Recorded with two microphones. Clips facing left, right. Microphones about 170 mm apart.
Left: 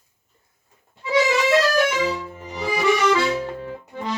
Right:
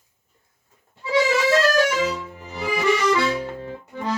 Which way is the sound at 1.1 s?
20° left (ahead or behind).